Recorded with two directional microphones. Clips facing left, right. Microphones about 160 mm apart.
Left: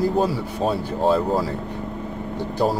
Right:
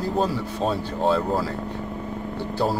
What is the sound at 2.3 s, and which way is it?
Speech, 15° left (ahead or behind).